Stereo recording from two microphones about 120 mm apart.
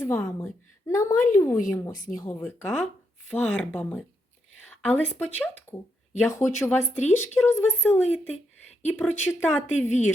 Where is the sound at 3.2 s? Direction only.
10° left (ahead or behind).